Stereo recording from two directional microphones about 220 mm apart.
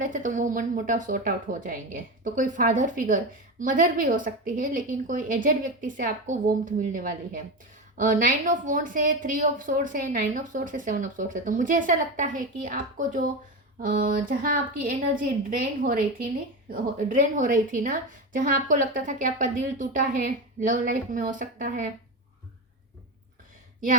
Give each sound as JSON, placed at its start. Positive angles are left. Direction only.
{"t": 0.0, "sound": "a woman's voice", "side_deg": -35}